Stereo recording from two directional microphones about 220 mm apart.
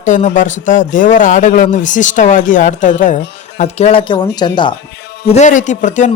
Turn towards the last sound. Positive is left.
turn(degrees=35)  # may be behind; listen again after turning